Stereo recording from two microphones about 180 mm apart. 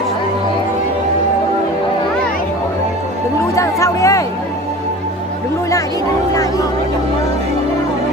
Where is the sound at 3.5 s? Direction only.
15° left (ahead or behind).